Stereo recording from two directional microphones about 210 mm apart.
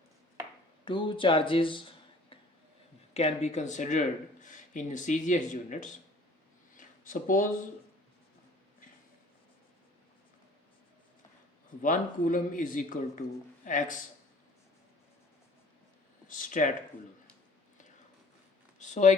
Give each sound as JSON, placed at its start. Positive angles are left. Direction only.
{"t": 0.9, "sound": "speech", "side_deg": 25}
{"t": 3.2, "sound": "speech", "side_deg": 30}
{"t": 6.7, "sound": "a sound", "side_deg": 40}
{"t": 11.8, "sound": "speech", "side_deg": 40}
{"t": 16.3, "sound": "speech", "side_deg": 40}
{"t": 18.8, "sound": "a sound", "side_deg": 35}